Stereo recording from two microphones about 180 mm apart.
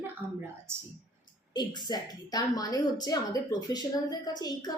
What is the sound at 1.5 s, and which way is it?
A woman's voice, 20° left (ahead or behind).